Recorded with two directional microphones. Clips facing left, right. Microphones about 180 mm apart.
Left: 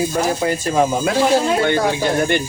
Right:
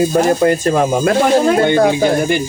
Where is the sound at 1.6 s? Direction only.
20° right (ahead or behind).